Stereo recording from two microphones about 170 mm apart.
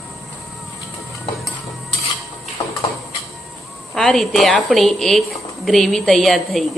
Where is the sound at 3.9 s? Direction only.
Centre (ahead or behind).